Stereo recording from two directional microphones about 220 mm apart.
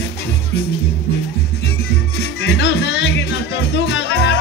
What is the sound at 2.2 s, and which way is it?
Music, 50° left (ahead or behind).